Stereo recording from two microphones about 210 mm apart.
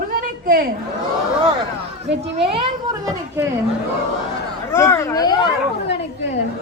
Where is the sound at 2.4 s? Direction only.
25° right (ahead or behind).